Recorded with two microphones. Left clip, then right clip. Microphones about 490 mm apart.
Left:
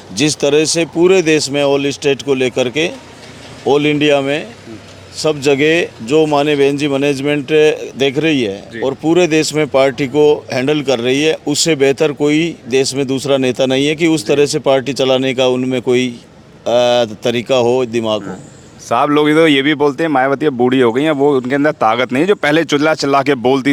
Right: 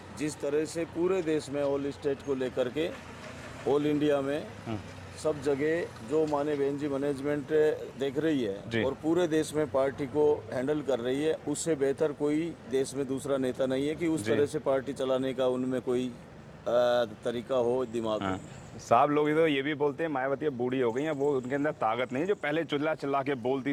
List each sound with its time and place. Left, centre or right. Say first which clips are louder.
0.2 s speech: left 18 dB; left
18.9 s speech: left 12 dB; centre